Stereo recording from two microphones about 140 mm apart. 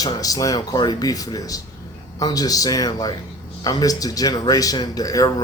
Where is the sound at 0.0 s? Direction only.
25° left (ahead or behind).